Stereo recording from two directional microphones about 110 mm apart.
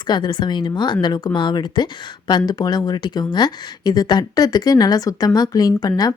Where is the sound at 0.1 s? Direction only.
45° left (ahead or behind).